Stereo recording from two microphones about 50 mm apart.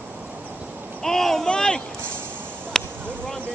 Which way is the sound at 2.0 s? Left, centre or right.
Right.